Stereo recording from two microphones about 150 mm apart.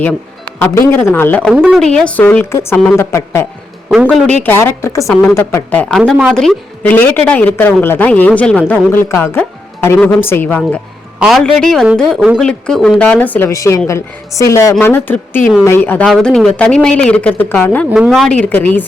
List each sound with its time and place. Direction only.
0.6 s a woman's voice: 15° left (ahead or behind)
4.4 s a woman's voice: 15° left (ahead or behind)
6.0 s a woman's voice: 5° right (ahead or behind); by 10.8 s 10° left (ahead or behind)
11.2 s a woman's voice: centre (ahead or behind)
17.9 s a woman's voice: centre (ahead or behind)